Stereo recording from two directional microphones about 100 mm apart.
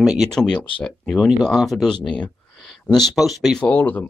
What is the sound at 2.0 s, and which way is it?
Speech, 50° left (ahead or behind).